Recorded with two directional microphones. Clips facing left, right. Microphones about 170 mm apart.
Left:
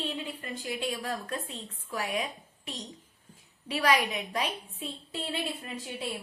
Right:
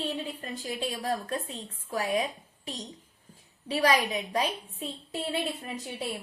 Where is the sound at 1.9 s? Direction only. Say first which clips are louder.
Right 4 dB; 35° right (ahead or behind).